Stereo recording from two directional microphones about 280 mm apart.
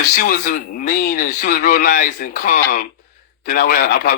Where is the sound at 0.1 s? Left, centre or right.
Left.